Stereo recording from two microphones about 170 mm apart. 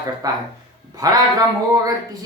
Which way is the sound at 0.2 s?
20° right (ahead or behind).